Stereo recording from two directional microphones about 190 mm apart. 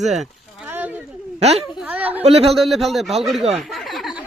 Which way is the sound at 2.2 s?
30° right (ahead or behind).